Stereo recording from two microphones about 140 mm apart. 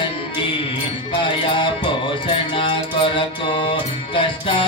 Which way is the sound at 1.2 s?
35° left (ahead or behind).